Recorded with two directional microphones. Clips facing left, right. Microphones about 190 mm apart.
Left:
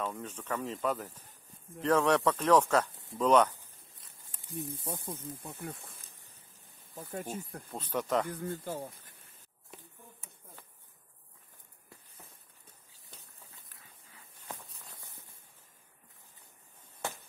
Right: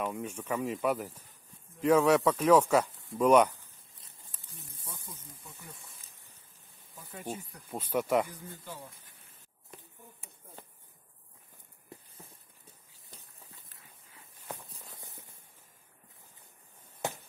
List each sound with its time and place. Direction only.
0.0 s speech: 10° right (ahead or behind)
4.9 s speech: 55° left (ahead or behind)
7.0 s speech: 45° left (ahead or behind)
7.7 s speech: 10° right (ahead or behind)
8.3 s speech: 50° left (ahead or behind)
9.7 s a sound: centre (ahead or behind)